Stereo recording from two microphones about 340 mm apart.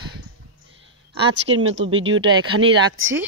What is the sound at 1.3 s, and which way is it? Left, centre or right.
A woman's voice, right.